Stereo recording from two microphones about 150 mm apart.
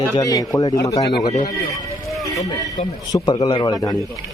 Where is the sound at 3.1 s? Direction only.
25° left (ahead or behind).